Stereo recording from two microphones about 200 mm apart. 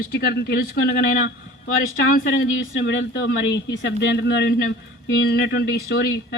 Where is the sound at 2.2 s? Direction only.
65° left (ahead or behind).